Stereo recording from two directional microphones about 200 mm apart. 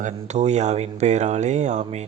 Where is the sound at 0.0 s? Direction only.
35° right (ahead or behind).